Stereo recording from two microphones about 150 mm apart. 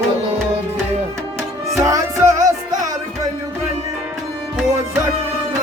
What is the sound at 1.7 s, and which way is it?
Music, 20° right (ahead or behind).